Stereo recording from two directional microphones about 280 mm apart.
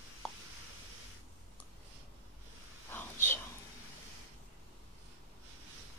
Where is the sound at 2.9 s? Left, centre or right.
Centre.